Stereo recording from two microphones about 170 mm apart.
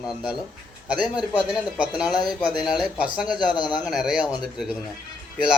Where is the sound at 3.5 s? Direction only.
25° left (ahead or behind).